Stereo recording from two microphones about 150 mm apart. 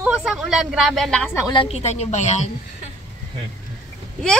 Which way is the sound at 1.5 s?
40° left (ahead or behind).